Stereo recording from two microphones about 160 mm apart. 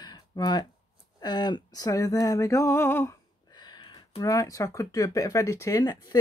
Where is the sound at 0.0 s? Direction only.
25° left (ahead or behind).